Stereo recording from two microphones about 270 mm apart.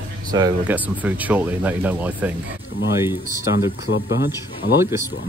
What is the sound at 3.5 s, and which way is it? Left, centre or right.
Speech, left.